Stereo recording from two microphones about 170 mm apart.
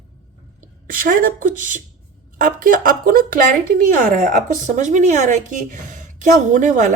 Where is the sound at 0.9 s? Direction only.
55° right (ahead or behind).